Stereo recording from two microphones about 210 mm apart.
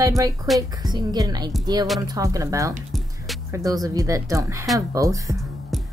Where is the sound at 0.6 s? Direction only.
20° right (ahead or behind).